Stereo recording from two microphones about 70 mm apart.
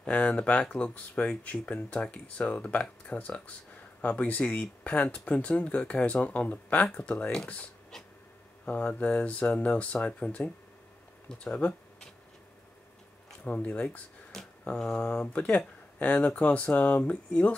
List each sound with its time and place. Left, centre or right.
0.0 s speech: centre
7.9 s cat: centre
8.6 s speech: left
13.4 s speech: centre
14.3 s a sound: centre
15.0 s speech: centre